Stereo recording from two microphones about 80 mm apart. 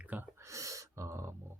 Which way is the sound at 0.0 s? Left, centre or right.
Centre.